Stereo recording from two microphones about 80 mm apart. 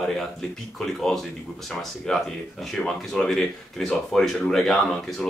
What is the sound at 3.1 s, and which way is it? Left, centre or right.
Speech, centre.